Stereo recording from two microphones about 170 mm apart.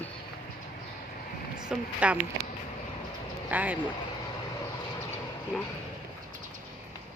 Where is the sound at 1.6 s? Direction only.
5° right (ahead or behind).